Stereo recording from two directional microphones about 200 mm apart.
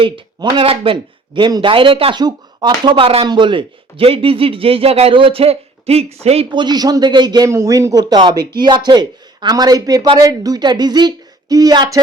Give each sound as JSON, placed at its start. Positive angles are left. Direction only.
{"t": 0.0, "sound": "speech", "side_deg": -25}